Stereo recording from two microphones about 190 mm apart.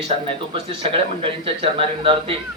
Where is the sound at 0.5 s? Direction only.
30° right (ahead or behind).